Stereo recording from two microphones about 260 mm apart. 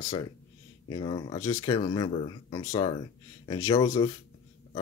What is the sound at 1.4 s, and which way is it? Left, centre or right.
Speech, left.